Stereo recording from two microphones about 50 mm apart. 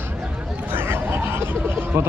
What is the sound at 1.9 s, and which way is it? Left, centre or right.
Speech, right.